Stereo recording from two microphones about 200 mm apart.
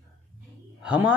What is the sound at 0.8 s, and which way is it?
Speech, 5° right (ahead or behind).